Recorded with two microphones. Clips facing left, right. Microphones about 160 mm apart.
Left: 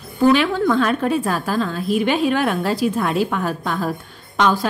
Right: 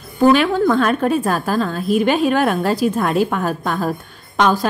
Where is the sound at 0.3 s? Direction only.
45° right (ahead or behind).